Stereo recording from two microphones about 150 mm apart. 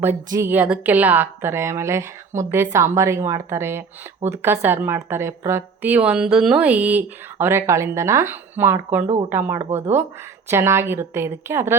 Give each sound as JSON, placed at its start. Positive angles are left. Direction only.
{"t": 0.3, "sound": "speech", "side_deg": -20}